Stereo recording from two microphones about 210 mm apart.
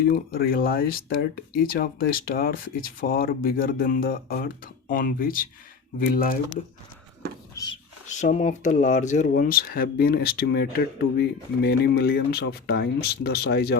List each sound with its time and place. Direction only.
0.1 s speech: 45° left (ahead or behind)
8.0 s speech: 35° left (ahead or behind)